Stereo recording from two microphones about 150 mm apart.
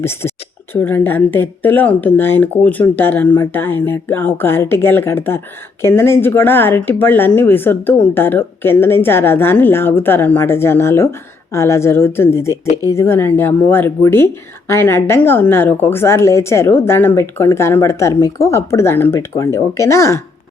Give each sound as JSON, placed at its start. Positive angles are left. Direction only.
{"t": 0.0, "sound": "a woman's voice", "side_deg": 15}